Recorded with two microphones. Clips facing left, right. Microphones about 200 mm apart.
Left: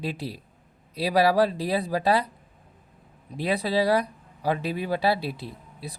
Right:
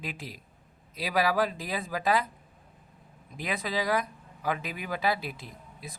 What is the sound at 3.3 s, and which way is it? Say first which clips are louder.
Speech: left 7 dB; 35° left (ahead or behind).